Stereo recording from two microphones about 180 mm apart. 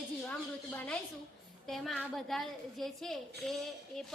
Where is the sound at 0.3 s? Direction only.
5° left (ahead or behind).